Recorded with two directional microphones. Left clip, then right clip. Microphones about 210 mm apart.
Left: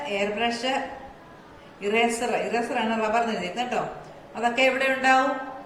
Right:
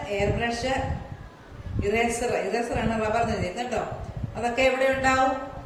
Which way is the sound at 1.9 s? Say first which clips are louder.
Left 2 dB; 10° right (ahead or behind).